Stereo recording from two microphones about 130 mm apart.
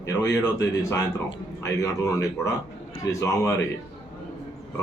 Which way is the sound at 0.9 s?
25° left (ahead or behind).